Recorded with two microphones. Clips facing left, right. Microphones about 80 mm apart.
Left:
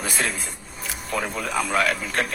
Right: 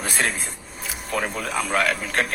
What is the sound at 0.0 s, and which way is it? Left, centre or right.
Speech, right.